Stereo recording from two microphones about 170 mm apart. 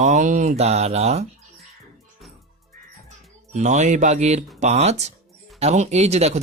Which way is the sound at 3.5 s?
45° right (ahead or behind).